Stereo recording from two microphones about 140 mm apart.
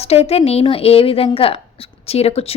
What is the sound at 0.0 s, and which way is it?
Speech, 45° left (ahead or behind).